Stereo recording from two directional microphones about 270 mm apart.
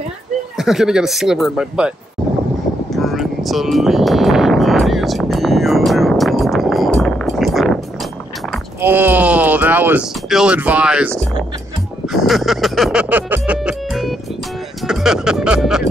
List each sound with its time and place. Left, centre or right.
0.6 s speech: centre
2.9 s vehicle: centre
8.5 s speech: centre
12.1 s music: centre